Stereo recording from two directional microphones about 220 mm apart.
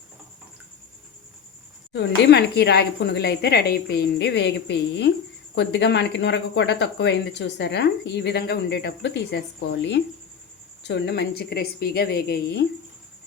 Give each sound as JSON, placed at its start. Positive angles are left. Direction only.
{"t": 1.9, "sound": "speech", "side_deg": 50}